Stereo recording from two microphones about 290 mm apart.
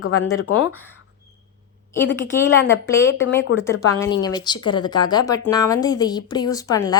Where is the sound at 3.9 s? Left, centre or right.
Centre.